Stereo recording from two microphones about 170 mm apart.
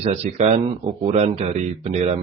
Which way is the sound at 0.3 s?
40° right (ahead or behind).